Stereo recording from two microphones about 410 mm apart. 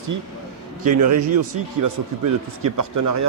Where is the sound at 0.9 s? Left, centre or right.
Right.